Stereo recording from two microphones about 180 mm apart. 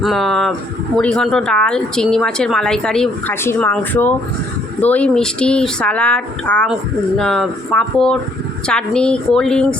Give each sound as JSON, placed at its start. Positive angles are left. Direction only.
{"t": 0.0, "sound": "speech", "side_deg": 0}